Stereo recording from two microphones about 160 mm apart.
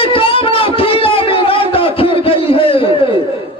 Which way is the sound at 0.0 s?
35° left (ahead or behind).